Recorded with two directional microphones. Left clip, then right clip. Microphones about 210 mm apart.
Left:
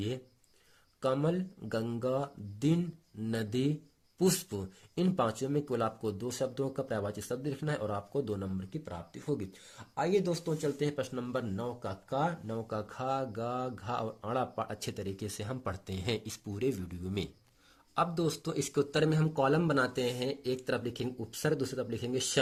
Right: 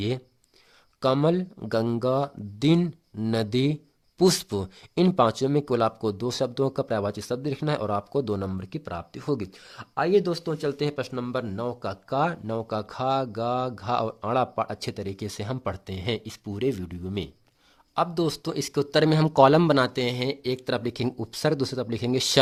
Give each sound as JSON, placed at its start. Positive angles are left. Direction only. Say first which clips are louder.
{"t": 1.0, "sound": "speech", "louder": "right 9 dB", "side_deg": -35}